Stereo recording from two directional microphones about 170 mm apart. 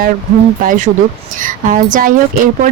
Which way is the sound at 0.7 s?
45° right (ahead or behind).